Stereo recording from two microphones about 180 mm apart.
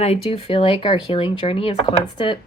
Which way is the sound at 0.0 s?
35° left (ahead or behind).